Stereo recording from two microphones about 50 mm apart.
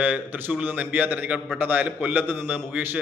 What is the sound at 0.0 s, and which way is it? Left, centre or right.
A man's voice, right.